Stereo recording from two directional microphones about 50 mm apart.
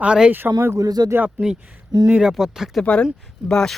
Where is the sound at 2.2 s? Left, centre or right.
Centre.